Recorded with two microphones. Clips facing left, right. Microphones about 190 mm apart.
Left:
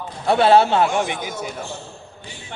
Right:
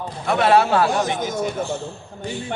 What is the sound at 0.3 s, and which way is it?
Speech, 30° left (ahead or behind).